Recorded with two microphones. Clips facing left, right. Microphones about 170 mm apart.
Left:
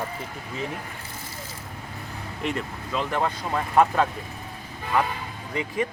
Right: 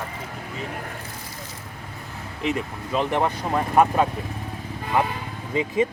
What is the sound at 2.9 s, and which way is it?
Speech, 20° right (ahead or behind).